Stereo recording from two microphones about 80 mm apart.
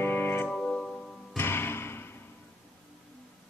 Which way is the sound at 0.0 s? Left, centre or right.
Left.